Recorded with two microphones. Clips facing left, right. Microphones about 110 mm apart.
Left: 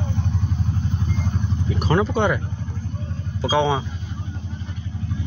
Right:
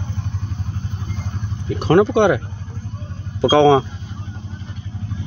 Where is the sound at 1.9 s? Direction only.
65° right (ahead or behind).